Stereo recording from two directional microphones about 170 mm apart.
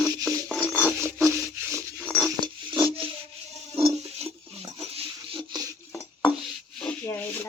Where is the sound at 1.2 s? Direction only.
15° right (ahead or behind).